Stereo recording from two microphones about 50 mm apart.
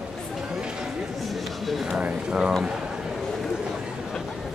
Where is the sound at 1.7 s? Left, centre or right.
Centre.